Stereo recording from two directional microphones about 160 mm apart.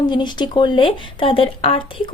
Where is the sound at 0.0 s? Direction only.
25° left (ahead or behind).